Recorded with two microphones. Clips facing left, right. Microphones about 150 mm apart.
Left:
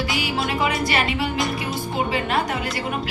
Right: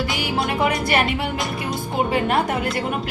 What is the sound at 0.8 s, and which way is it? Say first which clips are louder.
A woman's voice: right 2 dB; 55° right (ahead or behind).